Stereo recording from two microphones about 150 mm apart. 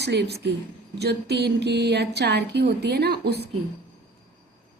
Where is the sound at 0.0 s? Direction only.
90° right.